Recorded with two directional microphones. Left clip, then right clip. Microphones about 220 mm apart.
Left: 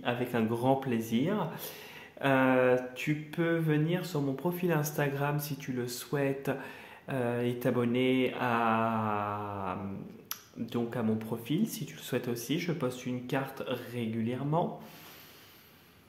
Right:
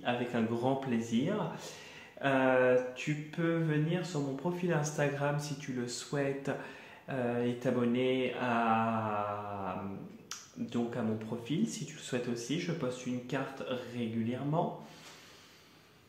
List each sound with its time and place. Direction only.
0.0 s mantra: 40° left (ahead or behind)
10.7 s mantra: 45° left (ahead or behind)